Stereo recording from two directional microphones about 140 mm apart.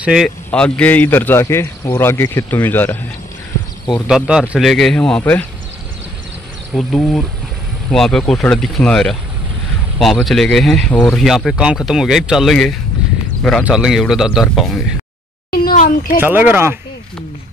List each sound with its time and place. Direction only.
0.0 s speech: 5° right (ahead or behind)
0.5 s speech: 10° left (ahead or behind)
4.1 s speech: 5° right (ahead or behind); by 5.4 s 10° left (ahead or behind)
6.7 s speech: 5° left (ahead or behind)
15.5 s a sound: 75° left (ahead or behind)
16.2 s speech: 15° right (ahead or behind)